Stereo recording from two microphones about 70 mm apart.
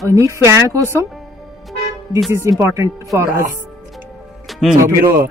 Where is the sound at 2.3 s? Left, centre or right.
Right.